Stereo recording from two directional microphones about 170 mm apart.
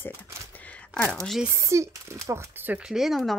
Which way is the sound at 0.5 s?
10° left (ahead or behind).